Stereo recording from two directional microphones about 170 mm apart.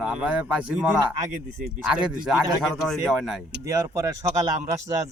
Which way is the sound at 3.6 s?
20° right (ahead or behind).